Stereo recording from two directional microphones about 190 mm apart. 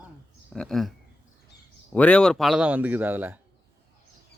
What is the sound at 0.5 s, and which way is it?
Speech, 5° left (ahead or behind).